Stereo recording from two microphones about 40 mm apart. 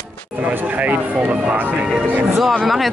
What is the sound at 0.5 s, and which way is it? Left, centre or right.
Speech, right.